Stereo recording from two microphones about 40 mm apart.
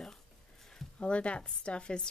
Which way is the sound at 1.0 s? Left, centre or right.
Left.